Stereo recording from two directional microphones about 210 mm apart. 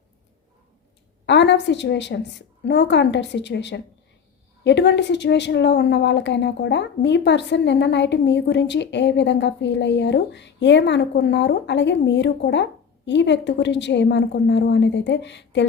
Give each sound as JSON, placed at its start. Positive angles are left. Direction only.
{"t": 1.3, "sound": "a woman's voice", "side_deg": 55}